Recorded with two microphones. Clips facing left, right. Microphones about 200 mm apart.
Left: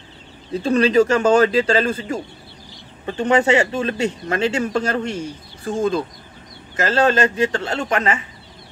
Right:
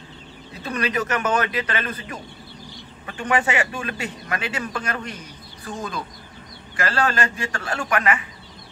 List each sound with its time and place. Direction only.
0.6 s speech: 30° left (ahead or behind)